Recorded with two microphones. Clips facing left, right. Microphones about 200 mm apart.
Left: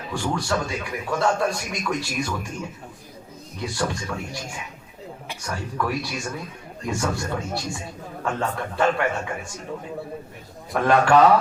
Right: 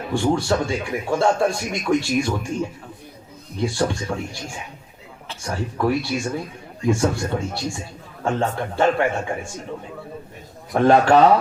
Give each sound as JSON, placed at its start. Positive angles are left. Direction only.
{"t": 0.1, "sound": "a man's voice", "side_deg": -30}
{"t": 10.7, "sound": "a man's voice", "side_deg": -30}